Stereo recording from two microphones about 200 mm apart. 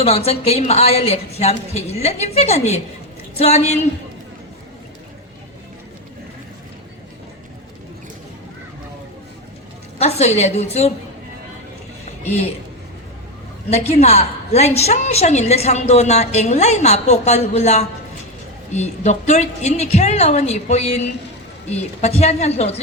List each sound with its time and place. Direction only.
0.0 s a woman's voice: 30° left (ahead or behind)
10.0 s a woman's voice: 30° left (ahead or behind)
13.7 s a woman's voice: 35° left (ahead or behind)
22.0 s a woman's voice: 35° left (ahead or behind)